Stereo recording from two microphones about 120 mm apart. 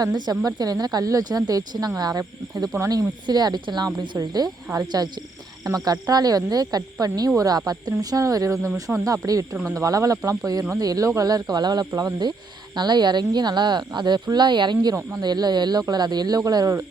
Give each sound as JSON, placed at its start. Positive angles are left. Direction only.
{"t": 0.0, "sound": "speech", "side_deg": -35}
{"t": 3.2, "sound": "speech", "side_deg": -35}